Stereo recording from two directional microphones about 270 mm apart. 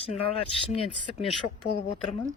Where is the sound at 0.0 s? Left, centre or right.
Left.